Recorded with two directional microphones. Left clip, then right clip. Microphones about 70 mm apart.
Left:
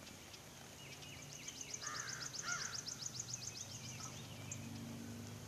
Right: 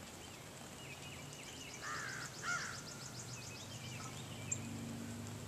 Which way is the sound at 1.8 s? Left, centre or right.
Centre.